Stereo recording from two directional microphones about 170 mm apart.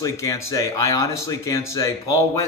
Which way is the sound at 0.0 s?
20° left (ahead or behind).